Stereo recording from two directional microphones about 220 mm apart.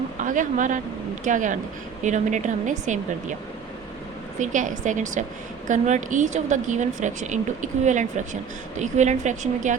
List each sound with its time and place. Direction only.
0.2 s a woman's voice: 35° right (ahead or behind)
4.4 s a woman's voice: 35° right (ahead or behind)